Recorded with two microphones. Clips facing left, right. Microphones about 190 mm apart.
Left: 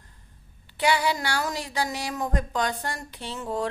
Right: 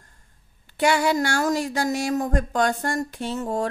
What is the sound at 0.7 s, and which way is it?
Speech, 45° right (ahead or behind).